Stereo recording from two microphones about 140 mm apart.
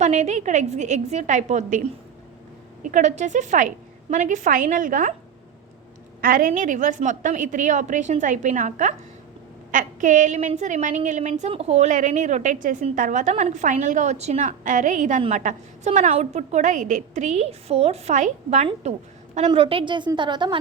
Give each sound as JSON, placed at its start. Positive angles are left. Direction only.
{"t": 0.0, "sound": "a woman's voice", "side_deg": -55}
{"t": 2.9, "sound": "a woman's voice", "side_deg": -55}
{"t": 6.2, "sound": "a woman's voice", "side_deg": -90}
{"t": 6.5, "sound": "a woman's voice", "side_deg": -65}
{"t": 19.5, "sound": "a woman's voice", "side_deg": -40}